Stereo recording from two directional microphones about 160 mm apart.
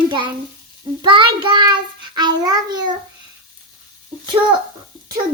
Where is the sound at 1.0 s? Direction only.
30° right (ahead or behind).